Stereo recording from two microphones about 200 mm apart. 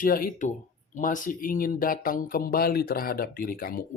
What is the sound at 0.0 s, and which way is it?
Speech, 45° left (ahead or behind).